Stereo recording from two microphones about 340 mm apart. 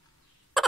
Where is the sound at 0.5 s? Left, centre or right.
Centre.